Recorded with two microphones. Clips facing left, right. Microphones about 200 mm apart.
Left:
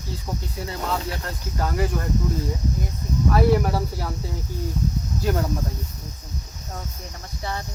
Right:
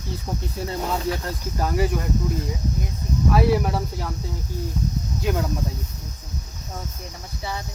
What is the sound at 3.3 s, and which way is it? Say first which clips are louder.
Speech: left 1 dB; centre (ahead or behind).